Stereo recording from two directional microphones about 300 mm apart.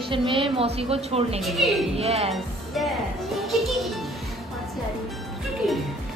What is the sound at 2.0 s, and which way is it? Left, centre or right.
Speech, centre.